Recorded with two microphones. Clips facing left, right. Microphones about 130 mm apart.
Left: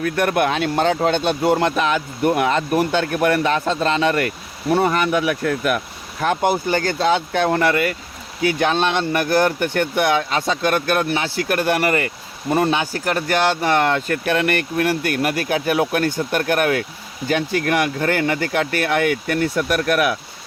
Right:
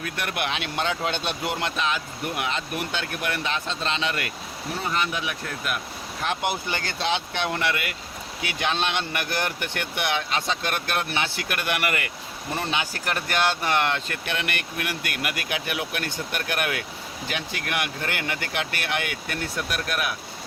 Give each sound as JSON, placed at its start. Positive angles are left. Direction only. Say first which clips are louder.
{"t": 0.0, "sound": "speech", "louder": "left 11 dB", "side_deg": 50}
{"t": 4.7, "sound": "speech", "louder": "left 11 dB", "side_deg": 60}
{"t": 6.2, "sound": "speech", "louder": "left 9 dB", "side_deg": 40}